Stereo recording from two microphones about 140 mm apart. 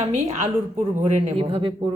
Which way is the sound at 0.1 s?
55° right (ahead or behind).